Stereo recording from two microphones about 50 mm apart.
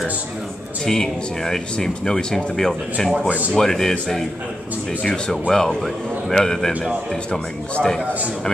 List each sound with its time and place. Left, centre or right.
0.8 s speech: centre
5.5 s speech: centre
8.0 s a man's voice: right